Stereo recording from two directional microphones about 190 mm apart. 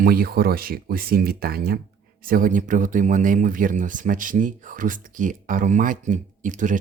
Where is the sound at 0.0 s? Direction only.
50° right (ahead or behind).